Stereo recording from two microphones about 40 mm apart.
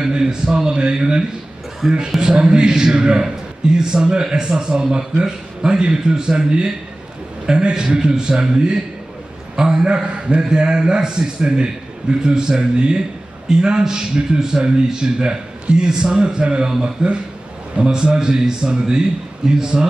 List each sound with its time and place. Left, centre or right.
0.0 s a man's voice: centre